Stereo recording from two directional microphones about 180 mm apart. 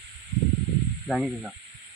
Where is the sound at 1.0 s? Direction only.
Centre (ahead or behind).